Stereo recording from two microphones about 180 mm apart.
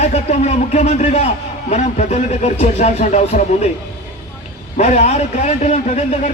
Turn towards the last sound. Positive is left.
turn(degrees=35)  # may be behind; listen again after turning